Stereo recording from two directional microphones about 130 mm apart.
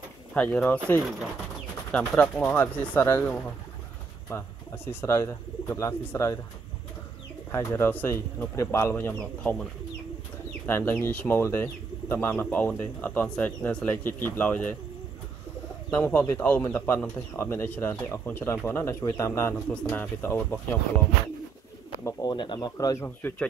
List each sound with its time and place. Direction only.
0.3 s speech: 10° left (ahead or behind)
1.9 s speech: 10° left (ahead or behind)
5.0 s speech: 20° left (ahead or behind)
7.5 s speech: 20° left (ahead or behind)
10.7 s speech: 20° left (ahead or behind)
15.9 s speech: 15° left (ahead or behind)
19.5 s speech: 10° left (ahead or behind)
22.0 s speech: 35° left (ahead or behind)